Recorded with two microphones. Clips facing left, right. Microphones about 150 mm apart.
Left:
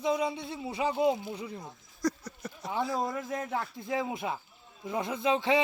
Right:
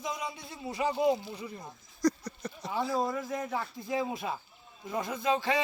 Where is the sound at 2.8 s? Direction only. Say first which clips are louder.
Right 1 dB; centre (ahead or behind).